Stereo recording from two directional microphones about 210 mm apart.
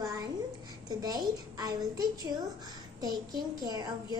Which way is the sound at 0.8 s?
20° right (ahead or behind).